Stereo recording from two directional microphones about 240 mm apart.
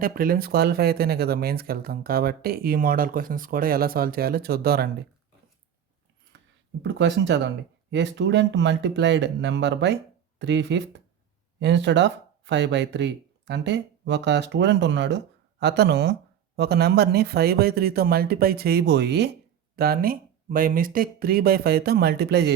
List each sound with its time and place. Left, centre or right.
0.0 s speech: right
6.8 s speech: right